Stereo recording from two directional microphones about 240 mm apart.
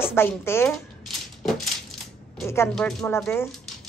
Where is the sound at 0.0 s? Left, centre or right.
Centre.